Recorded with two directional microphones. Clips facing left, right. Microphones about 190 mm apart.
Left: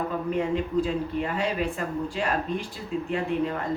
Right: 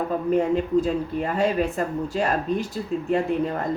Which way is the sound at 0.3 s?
45° right (ahead or behind).